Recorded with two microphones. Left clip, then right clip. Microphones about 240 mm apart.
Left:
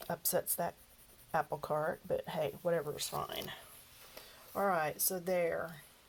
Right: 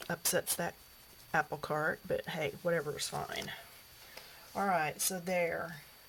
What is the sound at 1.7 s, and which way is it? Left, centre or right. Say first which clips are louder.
Speech: right 2 dB; right.